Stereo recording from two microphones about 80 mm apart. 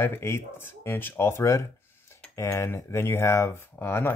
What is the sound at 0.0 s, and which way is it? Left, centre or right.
Speech, left.